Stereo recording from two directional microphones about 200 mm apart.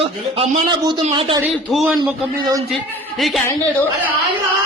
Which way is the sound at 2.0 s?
20° right (ahead or behind).